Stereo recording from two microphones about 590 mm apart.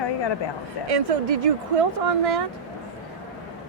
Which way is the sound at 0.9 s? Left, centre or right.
Right.